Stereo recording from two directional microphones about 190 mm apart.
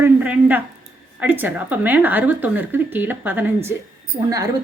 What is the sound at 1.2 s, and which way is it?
A woman's voice, 10° right (ahead or behind).